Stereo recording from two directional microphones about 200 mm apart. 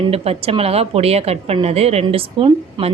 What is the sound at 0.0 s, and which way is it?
A woman's voice, 30° right (ahead or behind).